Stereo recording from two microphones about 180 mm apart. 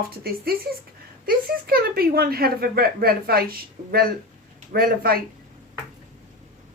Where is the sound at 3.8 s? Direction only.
45° right (ahead or behind).